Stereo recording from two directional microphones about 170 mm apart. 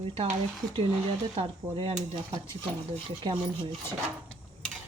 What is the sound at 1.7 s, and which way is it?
Speech, 30° right (ahead or behind).